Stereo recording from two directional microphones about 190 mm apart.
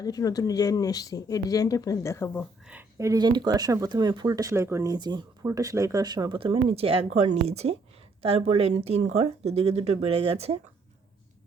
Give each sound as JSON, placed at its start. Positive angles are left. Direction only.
{"t": 0.0, "sound": "speech", "side_deg": 20}
{"t": 2.6, "sound": "speech", "side_deg": -10}